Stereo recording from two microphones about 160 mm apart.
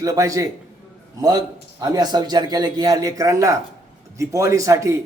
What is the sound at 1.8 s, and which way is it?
A man's voice, 25° right (ahead or behind).